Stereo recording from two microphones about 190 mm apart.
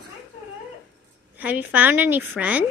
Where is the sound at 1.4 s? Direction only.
10° right (ahead or behind).